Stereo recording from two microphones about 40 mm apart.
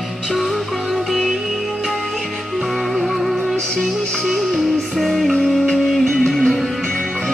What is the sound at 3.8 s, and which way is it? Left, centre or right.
Music, centre.